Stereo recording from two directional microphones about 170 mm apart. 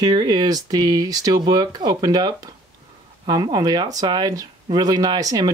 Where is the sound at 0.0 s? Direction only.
25° right (ahead or behind).